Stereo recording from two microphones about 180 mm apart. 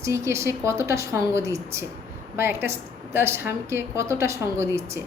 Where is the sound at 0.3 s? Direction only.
15° right (ahead or behind).